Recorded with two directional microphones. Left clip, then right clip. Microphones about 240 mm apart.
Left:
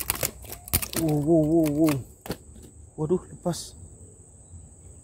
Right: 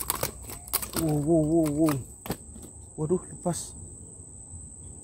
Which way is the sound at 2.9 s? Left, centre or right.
Centre.